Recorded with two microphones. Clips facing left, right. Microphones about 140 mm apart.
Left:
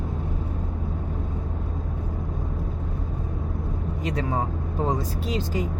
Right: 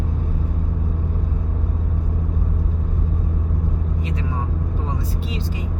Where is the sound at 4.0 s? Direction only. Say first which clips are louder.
Left 4 dB; 40° left (ahead or behind).